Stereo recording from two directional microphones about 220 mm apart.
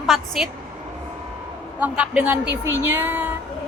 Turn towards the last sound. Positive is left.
turn(degrees=-10)  # may be behind; listen again after turning